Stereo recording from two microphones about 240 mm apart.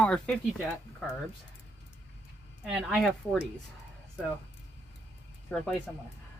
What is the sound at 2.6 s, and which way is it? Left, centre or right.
Speech, centre.